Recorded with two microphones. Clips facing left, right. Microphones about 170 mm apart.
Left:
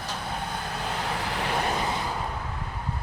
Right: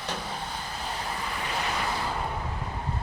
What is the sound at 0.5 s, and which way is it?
Vehicle, 65° left (ahead or behind).